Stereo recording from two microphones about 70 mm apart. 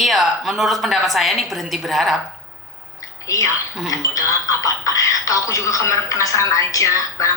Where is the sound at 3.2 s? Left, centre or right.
Left.